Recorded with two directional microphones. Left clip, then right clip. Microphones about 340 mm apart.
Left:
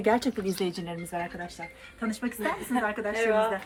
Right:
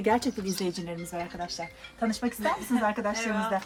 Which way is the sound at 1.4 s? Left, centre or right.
Right.